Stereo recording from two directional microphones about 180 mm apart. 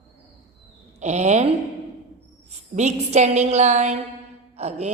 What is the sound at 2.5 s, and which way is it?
A woman's voice, 40° right (ahead or behind).